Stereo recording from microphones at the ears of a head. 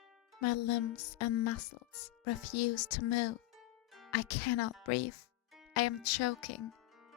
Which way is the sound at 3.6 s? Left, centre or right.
Left.